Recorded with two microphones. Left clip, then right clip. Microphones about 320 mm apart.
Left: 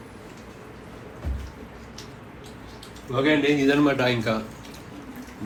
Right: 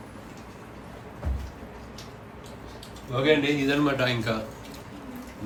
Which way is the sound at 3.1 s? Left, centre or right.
Centre.